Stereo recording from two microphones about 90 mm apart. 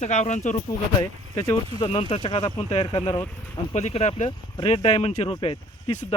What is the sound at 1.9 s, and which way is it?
Speech, 75° left (ahead or behind).